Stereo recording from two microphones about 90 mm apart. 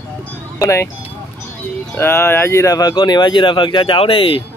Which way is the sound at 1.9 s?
25° left (ahead or behind).